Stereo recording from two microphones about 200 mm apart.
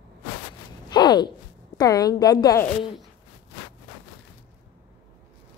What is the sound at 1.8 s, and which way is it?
Speech, 20° left (ahead or behind).